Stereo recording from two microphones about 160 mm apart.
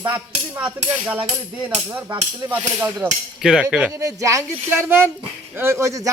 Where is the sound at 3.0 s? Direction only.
5° right (ahead or behind).